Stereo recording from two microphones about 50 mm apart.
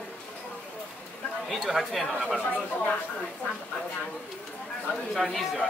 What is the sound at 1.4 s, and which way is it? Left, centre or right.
Speech, centre.